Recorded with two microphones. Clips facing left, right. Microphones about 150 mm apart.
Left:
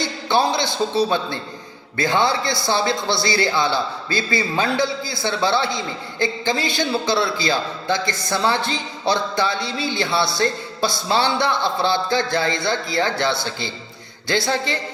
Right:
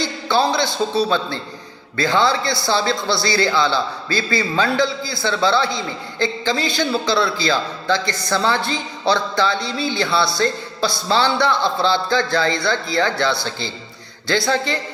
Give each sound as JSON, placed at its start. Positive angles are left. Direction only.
{"t": 0.0, "sound": "a man's voice", "side_deg": 20}